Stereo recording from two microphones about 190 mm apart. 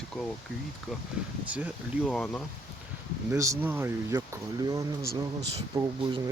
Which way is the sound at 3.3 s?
15° right (ahead or behind).